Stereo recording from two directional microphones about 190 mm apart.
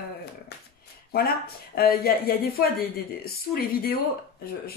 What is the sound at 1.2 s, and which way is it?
Speech, 55° left (ahead or behind).